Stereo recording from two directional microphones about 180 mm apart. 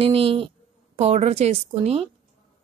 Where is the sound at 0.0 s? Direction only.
30° right (ahead or behind).